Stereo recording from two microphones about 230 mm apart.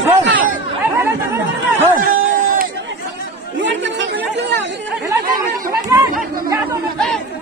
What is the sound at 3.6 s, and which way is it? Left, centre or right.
Chatter, right.